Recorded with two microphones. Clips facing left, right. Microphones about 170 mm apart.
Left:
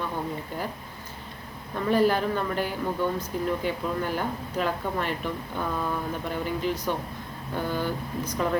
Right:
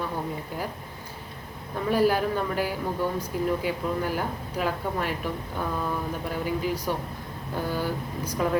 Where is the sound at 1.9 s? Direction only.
10° right (ahead or behind).